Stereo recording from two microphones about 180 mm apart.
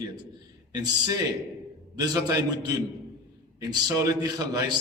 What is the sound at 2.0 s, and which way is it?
A man's voice, 20° right (ahead or behind).